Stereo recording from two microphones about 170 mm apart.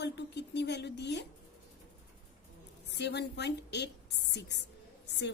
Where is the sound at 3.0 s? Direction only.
85° left.